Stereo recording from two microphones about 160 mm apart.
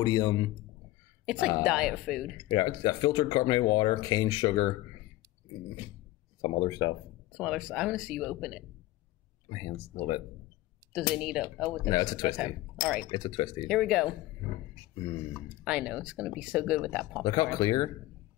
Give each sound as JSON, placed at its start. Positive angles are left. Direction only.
{"t": 0.0, "sound": "speech", "side_deg": 25}
{"t": 1.2, "sound": "a woman's voice", "side_deg": -5}
{"t": 2.5, "sound": "speech", "side_deg": 25}
{"t": 6.4, "sound": "speech", "side_deg": 30}
{"t": 7.3, "sound": "speech", "side_deg": 0}
{"t": 9.5, "sound": "speech", "side_deg": 30}
{"t": 11.1, "sound": "speech", "side_deg": -5}
{"t": 11.9, "sound": "speech", "side_deg": 25}
{"t": 13.7, "sound": "speech", "side_deg": 0}
{"t": 15.3, "sound": "speech", "side_deg": -5}
{"t": 17.2, "sound": "speech", "side_deg": 25}